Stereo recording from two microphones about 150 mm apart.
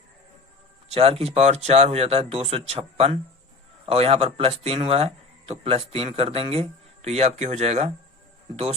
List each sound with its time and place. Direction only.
0.9 s speech: 40° right (ahead or behind)